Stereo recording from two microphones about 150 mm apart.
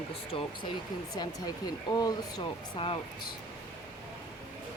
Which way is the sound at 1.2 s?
25° left (ahead or behind).